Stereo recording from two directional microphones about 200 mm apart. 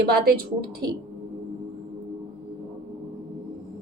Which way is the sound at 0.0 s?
55° right (ahead or behind).